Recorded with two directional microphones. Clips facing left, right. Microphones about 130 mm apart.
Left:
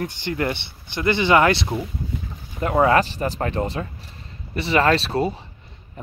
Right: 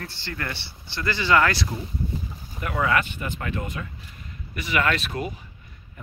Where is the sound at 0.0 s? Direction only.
20° left (ahead or behind).